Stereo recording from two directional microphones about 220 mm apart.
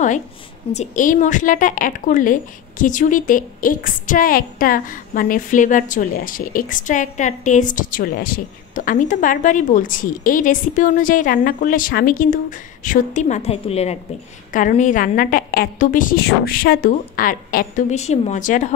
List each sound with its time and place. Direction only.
0.7 s a woman's voice: 35° left (ahead or behind)